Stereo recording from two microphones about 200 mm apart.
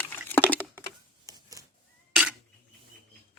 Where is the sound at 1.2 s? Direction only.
15° right (ahead or behind).